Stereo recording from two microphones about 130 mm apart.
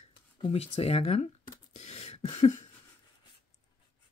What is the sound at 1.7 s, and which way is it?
Beatboxing, 60° left (ahead or behind).